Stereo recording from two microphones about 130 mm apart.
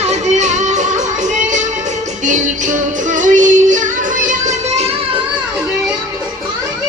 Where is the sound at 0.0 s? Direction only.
60° right (ahead or behind).